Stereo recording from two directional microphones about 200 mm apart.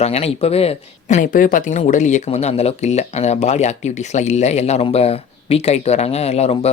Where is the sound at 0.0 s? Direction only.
30° left (ahead or behind).